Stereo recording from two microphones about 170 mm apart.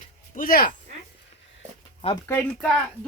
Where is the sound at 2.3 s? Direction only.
5° left (ahead or behind).